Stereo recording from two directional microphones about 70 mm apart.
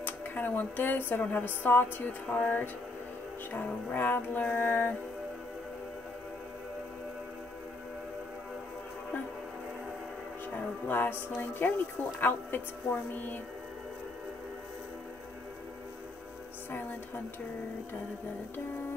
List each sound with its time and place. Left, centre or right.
0.0 s speech: left
2.3 s music: left
10.9 s speech: left